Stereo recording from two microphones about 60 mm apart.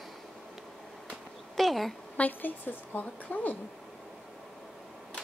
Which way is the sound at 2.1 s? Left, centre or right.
Left.